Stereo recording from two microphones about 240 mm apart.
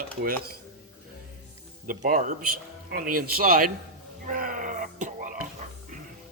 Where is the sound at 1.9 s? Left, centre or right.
Right.